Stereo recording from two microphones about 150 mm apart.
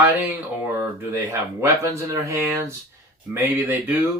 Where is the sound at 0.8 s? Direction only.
20° right (ahead or behind).